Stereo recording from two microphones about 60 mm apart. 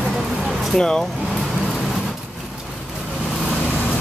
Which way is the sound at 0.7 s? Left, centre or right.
Centre.